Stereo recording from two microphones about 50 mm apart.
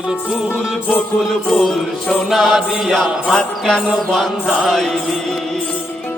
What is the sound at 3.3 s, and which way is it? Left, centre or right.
Music, centre.